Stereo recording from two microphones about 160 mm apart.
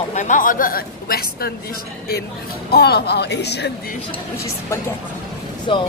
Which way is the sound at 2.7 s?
90° left.